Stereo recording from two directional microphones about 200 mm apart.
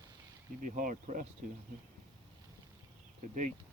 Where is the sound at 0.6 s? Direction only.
40° right (ahead or behind).